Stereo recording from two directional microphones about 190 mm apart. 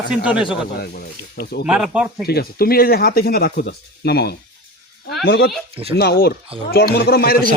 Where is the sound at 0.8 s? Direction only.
55° left (ahead or behind).